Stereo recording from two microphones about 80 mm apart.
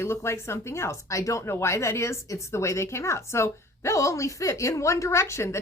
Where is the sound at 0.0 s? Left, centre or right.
Left.